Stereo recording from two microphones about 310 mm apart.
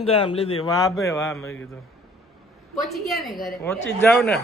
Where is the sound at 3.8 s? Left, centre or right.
Left.